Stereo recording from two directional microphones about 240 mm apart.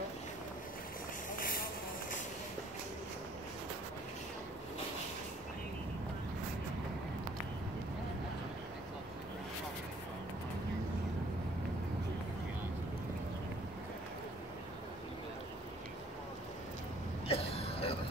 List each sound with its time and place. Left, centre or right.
17.3 s throat clearing: left